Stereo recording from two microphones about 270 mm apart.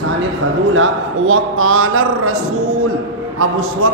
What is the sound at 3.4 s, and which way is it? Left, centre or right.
Speech, right.